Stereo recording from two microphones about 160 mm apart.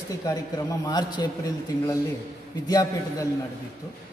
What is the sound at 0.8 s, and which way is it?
A man's voice, 25° left (ahead or behind).